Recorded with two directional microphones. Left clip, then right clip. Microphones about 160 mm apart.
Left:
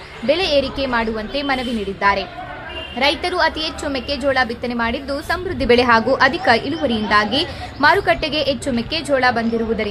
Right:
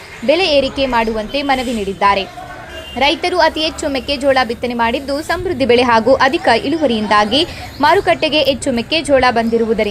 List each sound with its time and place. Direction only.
0.3 s a woman's voice: 20° right (ahead or behind)